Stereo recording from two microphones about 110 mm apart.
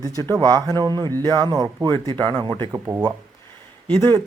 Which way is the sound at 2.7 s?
20° right (ahead or behind).